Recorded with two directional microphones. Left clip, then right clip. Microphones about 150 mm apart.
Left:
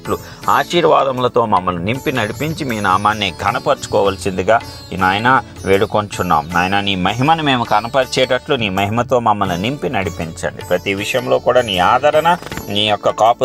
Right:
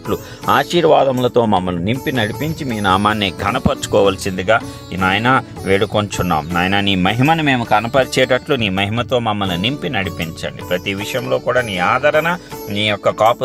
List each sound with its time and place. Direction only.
0.1 s speech: 35° right (ahead or behind); by 2.9 s 20° right (ahead or behind)
2.9 s speech: 35° right (ahead or behind)
4.0 s speech: 20° right (ahead or behind)
4.4 s speech: centre (ahead or behind)
4.9 s speech: 20° right (ahead or behind)
8.7 s speech: 15° right (ahead or behind)
10.2 s speech: 25° right (ahead or behind)
11.1 s speech: centre (ahead or behind)